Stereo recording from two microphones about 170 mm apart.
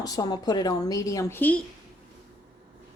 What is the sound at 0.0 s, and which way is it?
A woman's voice, 25° left (ahead or behind).